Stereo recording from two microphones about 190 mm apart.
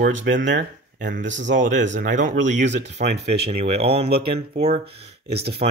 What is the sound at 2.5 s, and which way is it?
Speech, 65° right (ahead or behind).